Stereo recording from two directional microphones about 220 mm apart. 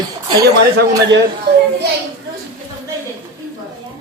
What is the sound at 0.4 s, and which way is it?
Speech, 45° right (ahead or behind).